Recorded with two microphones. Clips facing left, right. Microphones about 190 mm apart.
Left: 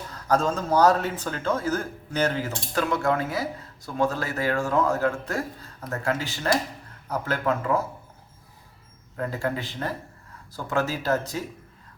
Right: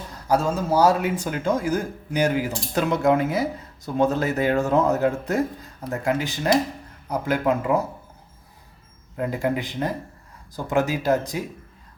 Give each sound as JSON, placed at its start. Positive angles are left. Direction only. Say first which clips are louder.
{"t": 0.3, "sound": "a man's voice", "louder": "right 2 dB", "side_deg": -10}
{"t": 9.1, "sound": "a man's voice", "louder": "right 4 dB", "side_deg": -15}